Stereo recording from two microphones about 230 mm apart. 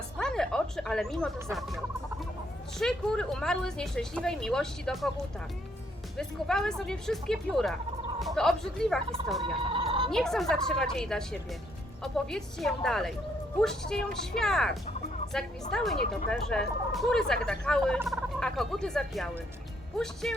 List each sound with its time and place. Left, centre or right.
0.2 s a sound: centre
1.5 s speech: centre
6.1 s speech: centre
9.6 s a sound: right
10.1 s speech: centre
18.0 s turkey: centre
19.9 s speech: centre